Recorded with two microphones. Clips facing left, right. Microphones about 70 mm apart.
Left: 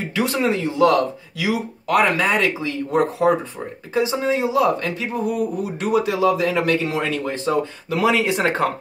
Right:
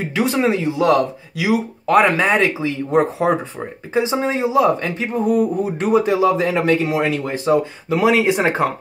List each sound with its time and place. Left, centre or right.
0.1 s speech: right